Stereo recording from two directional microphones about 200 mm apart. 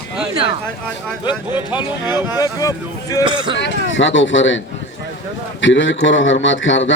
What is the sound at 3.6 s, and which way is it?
Speech, 70° left (ahead or behind).